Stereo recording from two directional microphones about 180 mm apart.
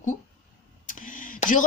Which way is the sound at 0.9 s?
45° left (ahead or behind).